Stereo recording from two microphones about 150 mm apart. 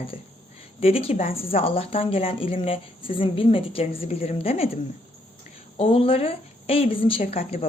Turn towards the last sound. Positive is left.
turn(degrees=45)  # may be behind; listen again after turning